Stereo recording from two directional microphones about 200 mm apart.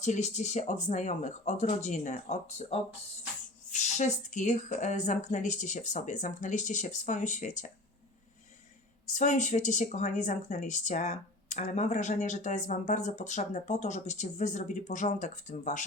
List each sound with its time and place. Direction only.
0.0 s speech: 35° left (ahead or behind)
9.0 s speech: 40° left (ahead or behind)